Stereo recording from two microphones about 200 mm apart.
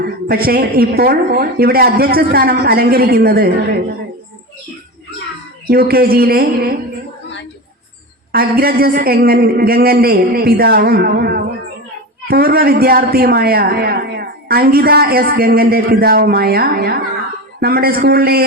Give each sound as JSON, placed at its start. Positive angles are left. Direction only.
{"t": 0.0, "sound": "a woman's voice", "side_deg": -50}
{"t": 5.6, "sound": "a woman's voice", "side_deg": -50}
{"t": 8.3, "sound": "a woman's voice", "side_deg": -50}